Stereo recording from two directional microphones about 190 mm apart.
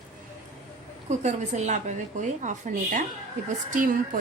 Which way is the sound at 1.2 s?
35° right (ahead or behind).